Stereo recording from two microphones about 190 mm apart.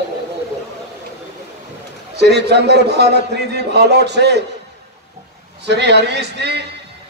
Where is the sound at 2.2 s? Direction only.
60° right (ahead or behind).